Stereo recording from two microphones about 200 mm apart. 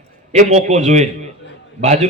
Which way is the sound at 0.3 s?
35° right (ahead or behind).